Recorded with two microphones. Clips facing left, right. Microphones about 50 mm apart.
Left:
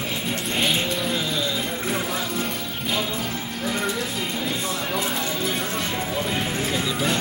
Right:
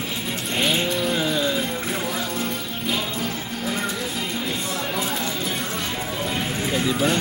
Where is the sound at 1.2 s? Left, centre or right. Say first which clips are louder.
Right 3 dB; right.